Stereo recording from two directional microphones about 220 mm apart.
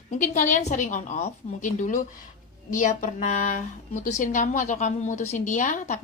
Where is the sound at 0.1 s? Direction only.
35° left (ahead or behind).